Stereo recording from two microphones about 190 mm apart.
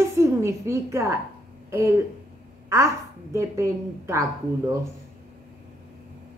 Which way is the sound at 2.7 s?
15° right (ahead or behind).